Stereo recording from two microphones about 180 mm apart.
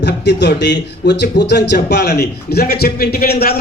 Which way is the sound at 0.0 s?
75° left (ahead or behind).